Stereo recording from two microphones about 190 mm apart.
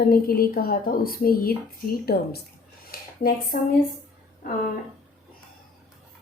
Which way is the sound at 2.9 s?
50° left (ahead or behind).